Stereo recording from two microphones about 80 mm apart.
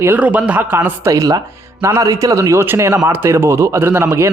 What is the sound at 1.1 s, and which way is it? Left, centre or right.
A man's voice, right.